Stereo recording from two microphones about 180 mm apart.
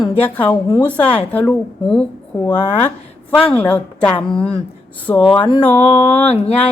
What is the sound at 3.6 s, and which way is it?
Speech, 10° left (ahead or behind).